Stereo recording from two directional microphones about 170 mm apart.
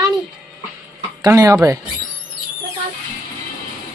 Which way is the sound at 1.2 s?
20° right (ahead or behind).